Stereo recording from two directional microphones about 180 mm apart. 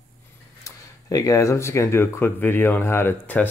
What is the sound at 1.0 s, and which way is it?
Speech, 20° left (ahead or behind).